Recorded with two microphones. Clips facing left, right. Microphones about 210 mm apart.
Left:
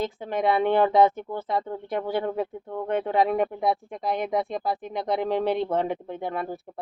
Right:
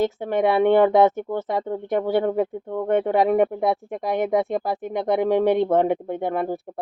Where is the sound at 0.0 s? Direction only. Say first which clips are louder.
Right 5 dB; 50° right (ahead or behind).